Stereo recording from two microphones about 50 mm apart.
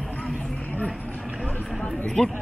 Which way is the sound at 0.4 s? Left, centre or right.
Left.